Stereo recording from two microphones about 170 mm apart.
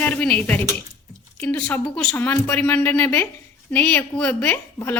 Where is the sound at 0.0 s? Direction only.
5° left (ahead or behind).